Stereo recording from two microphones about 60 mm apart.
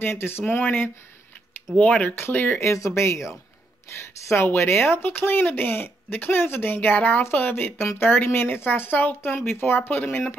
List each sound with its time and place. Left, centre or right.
0.0 s speech: left
2.6 s speech: left
4.3 s speech: left
5.0 s speech: left